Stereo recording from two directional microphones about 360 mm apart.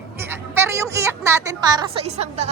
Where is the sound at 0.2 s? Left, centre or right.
Centre.